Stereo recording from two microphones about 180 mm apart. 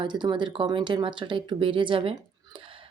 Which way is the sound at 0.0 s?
25° right (ahead or behind).